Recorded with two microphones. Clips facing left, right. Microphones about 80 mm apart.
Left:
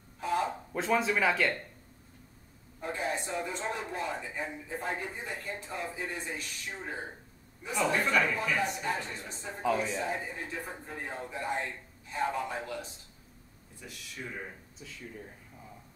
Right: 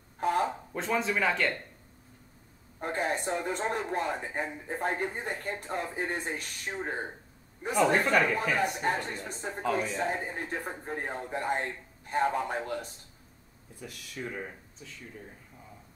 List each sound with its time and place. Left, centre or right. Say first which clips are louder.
0.2 s a sound: right 3 dB; right
0.7 s speech: left 1 dB; centre
2.8 s speech: right 3 dB; right
9.5 s speech: even; centre
9.9 s speech: right 3 dB; right
14.8 s speech: left 2 dB; centre